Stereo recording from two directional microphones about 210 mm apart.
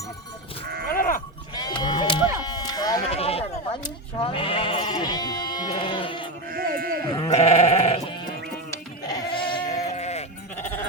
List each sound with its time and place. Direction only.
0.6 s sheep: 45° right (ahead or behind)
0.9 s sheep: 40° left (ahead or behind)
1.5 s sheep: 20° left (ahead or behind)
3.1 s sheep: 30° left (ahead or behind)
6.5 s sheep: 45° right (ahead or behind)
7.3 s sheep: 30° left (ahead or behind)
9.0 s sheep: 15° left (ahead or behind)
9.5 s goat: 30° left (ahead or behind)